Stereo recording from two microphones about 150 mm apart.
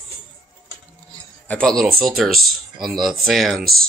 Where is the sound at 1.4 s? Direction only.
5° left (ahead or behind).